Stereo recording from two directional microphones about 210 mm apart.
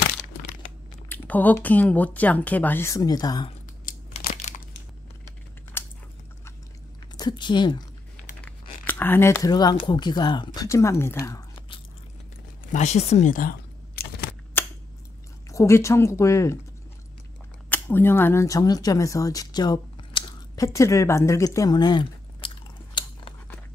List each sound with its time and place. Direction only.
1.0 s speech: 10° left (ahead or behind)
3.8 s a sound: 35° left (ahead or behind)
5.8 s a sound: 10° left (ahead or behind)
7.2 s speech: 20° left (ahead or behind)
8.4 s speech: 5° left (ahead or behind)
12.7 s speech: 30° left (ahead or behind)
14.6 s scissors: 10° left (ahead or behind)
15.5 s speech: 15° left (ahead or behind)
17.6 s speech: 10° left (ahead or behind)
23.0 s a sound: 20° left (ahead or behind)